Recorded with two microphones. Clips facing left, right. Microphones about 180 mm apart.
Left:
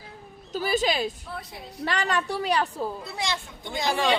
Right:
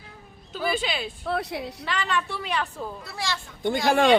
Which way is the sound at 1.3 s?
75° right (ahead or behind).